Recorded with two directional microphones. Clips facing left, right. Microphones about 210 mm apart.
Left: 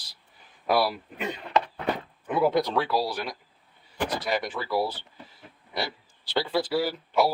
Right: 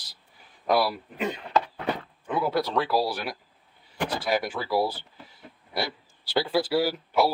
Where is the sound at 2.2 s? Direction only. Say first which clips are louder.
Left 3 dB; 20° left (ahead or behind).